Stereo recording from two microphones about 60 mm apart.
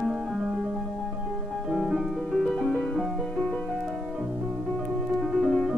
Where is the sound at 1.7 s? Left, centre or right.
Centre.